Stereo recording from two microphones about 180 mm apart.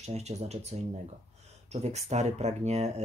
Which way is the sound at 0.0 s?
35° right (ahead or behind).